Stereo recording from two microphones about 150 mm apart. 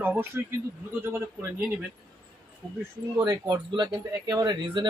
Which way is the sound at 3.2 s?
25° right (ahead or behind).